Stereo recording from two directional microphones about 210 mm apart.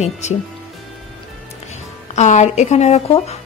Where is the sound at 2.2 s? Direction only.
35° left (ahead or behind).